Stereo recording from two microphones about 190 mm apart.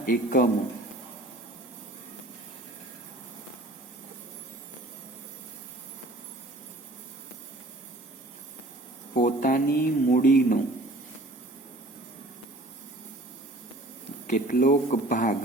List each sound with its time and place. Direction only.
0.0 s speech: 45° left (ahead or behind)
9.1 s speech: 45° left (ahead or behind)
14.3 s speech: 45° left (ahead or behind)